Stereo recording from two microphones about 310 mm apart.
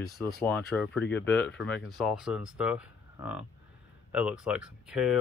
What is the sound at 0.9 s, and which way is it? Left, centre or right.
Speech, left.